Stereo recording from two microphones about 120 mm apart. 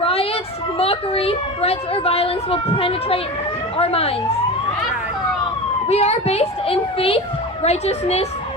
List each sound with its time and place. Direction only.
0.0 s a sound: 55° left (ahead or behind)
0.8 s a child's voice: 55° left (ahead or behind)
5.9 s a child's voice: 60° left (ahead or behind)